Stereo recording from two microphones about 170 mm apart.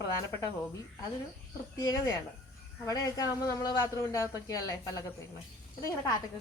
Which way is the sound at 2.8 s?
20° left (ahead or behind).